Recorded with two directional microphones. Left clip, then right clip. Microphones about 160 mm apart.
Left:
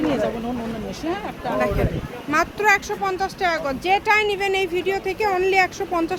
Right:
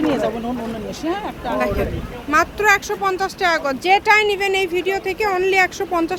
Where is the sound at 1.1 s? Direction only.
35° right (ahead or behind).